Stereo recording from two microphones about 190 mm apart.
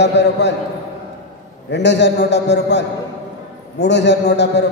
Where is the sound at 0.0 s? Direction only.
65° left (ahead or behind).